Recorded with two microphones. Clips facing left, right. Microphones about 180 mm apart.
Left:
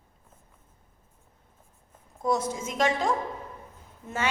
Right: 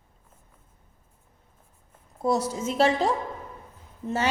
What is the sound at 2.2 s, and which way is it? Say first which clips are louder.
A woman's voice: right 2 dB; 35° right (ahead or behind).